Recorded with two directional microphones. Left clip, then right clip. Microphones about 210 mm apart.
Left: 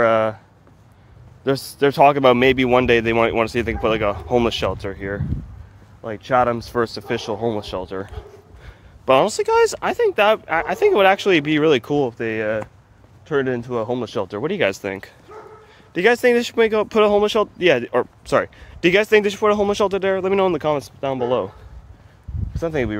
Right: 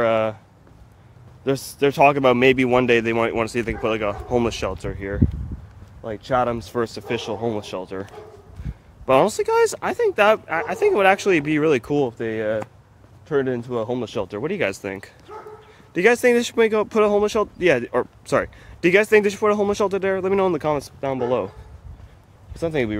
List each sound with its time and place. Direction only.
0.0 s a sound: 15° left (ahead or behind)
1.4 s speech: 15° left (ahead or behind)
15.9 s speech: 5° right (ahead or behind)
16.9 s speech: 10° left (ahead or behind)
22.6 s speech: centre (ahead or behind)